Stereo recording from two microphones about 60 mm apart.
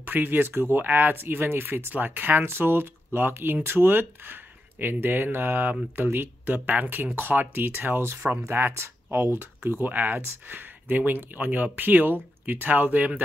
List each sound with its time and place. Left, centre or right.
0.0 s speech: right